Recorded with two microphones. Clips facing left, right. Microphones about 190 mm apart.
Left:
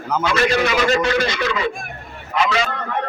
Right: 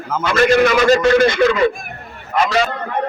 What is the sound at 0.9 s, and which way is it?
Speech, 50° right (ahead or behind).